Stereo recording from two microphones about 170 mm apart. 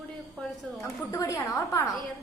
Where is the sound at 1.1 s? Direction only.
20° left (ahead or behind).